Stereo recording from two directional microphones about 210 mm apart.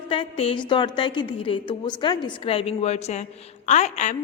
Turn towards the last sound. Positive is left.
turn(degrees=35)  # may be behind; listen again after turning